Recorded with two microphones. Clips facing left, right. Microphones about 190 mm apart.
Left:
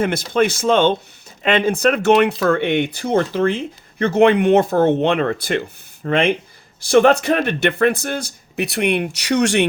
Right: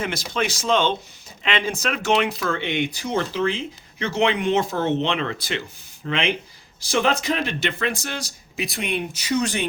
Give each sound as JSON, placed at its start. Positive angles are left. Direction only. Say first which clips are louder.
{"t": 0.0, "sound": "speech", "louder": "left 8 dB", "side_deg": 55}